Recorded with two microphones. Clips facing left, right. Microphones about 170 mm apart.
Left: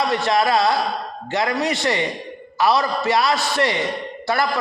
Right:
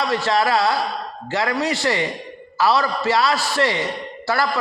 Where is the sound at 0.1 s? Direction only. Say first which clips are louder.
Left 1 dB; 20° left (ahead or behind).